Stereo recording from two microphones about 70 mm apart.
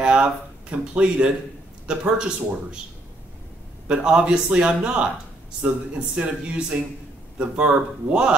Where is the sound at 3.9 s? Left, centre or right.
Centre.